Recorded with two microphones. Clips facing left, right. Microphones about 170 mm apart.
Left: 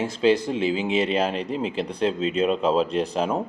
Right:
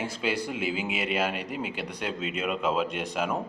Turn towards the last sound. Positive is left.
turn(degrees=35)  # may be behind; listen again after turning